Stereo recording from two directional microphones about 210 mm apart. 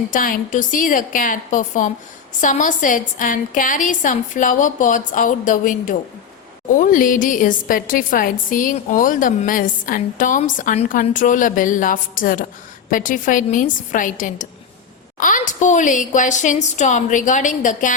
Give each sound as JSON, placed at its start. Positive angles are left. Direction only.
{"t": 0.1, "sound": "a woman's voice", "side_deg": 40}